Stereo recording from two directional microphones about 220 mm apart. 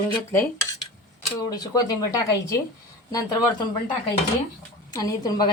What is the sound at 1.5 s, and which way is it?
Speech, 15° left (ahead or behind).